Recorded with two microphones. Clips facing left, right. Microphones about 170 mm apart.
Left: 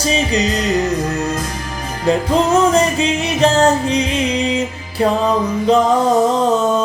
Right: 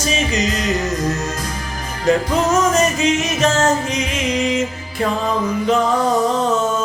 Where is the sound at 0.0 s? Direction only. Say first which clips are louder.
Left 3 dB; 35° left (ahead or behind).